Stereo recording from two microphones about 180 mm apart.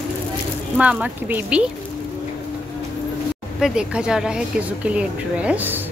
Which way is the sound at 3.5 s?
5° right (ahead or behind).